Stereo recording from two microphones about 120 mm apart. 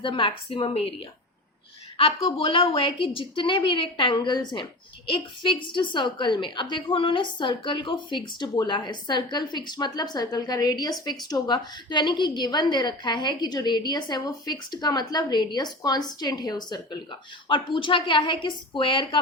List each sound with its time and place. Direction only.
0.0 s a woman's voice: 45° left (ahead or behind)
2.0 s a woman's voice: 50° left (ahead or behind)